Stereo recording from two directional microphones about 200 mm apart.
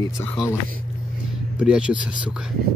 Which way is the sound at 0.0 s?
15° left (ahead or behind).